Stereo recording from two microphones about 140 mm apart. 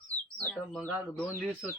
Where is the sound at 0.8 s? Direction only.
10° left (ahead or behind).